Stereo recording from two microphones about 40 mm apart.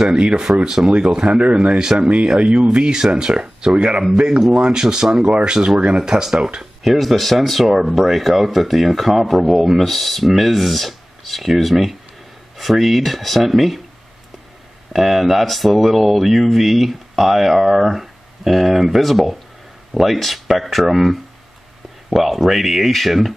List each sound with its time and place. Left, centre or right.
0.1 s speech: right
1.6 s speech: centre
6.8 s speech: centre
14.9 s speech: centre